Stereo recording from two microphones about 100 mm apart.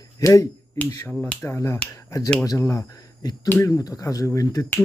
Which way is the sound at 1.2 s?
20° left (ahead or behind).